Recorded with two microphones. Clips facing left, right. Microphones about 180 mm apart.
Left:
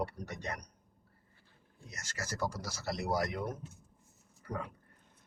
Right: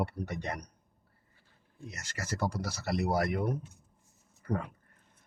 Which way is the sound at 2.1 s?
60° right (ahead or behind).